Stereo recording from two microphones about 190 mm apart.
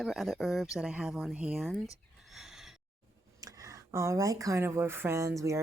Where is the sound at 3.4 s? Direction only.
15° right (ahead or behind).